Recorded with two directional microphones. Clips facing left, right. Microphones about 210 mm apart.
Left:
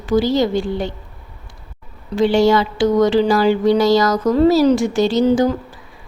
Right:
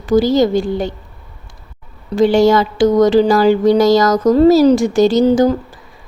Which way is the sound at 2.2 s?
45° right (ahead or behind).